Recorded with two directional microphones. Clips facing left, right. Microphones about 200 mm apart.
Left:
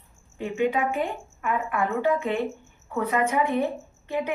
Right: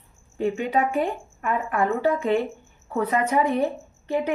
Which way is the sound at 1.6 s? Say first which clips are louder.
Right 2 dB; 35° right (ahead or behind).